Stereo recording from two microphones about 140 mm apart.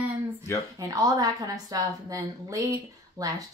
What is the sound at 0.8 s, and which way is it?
A woman's voice, 25° right (ahead or behind).